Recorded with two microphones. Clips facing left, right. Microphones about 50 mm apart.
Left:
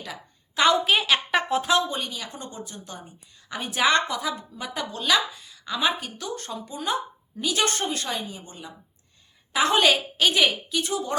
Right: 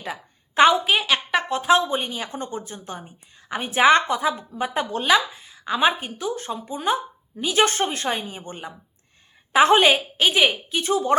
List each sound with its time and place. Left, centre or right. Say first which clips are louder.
0.0 s a sound: right 5 dB; right
0.7 s a woman's voice: right 1 dB; centre
1.6 s a woman's voice: right 5 dB; right
9.7 s a woman's voice: right 3 dB; right
10.7 s a woman's voice: right 6 dB; right